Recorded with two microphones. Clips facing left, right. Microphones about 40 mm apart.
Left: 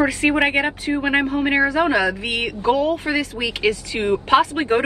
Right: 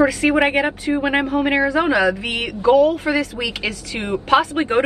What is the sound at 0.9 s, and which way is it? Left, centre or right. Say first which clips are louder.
Speech: right 2 dB; centre.